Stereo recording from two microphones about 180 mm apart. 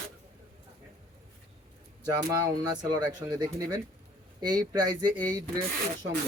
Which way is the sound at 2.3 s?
20° right (ahead or behind).